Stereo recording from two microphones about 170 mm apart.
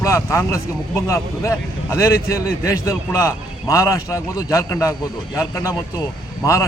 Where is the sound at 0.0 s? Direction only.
15° left (ahead or behind).